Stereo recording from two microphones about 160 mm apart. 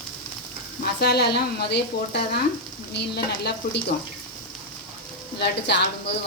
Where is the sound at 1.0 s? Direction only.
90° left.